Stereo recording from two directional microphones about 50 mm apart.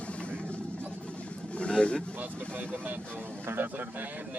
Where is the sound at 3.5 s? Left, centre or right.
Right.